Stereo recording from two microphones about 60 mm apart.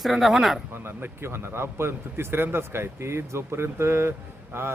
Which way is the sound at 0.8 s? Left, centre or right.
Right.